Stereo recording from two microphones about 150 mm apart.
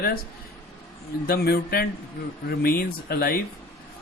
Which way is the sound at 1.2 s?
90° left.